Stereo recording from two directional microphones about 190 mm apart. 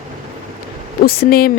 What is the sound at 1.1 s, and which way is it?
Speech, 50° left (ahead or behind).